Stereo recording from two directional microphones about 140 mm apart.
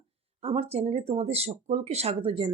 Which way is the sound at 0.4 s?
45° right (ahead or behind).